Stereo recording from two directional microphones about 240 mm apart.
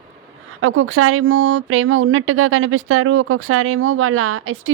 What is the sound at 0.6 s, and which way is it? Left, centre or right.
Speech, right.